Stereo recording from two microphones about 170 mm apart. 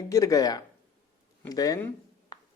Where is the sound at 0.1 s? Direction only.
20° left (ahead or behind).